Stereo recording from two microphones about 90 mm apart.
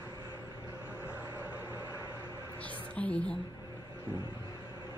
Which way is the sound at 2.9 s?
15° left (ahead or behind).